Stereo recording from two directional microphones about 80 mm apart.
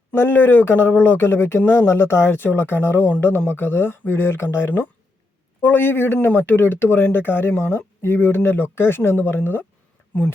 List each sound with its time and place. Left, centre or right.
0.1 s speech: left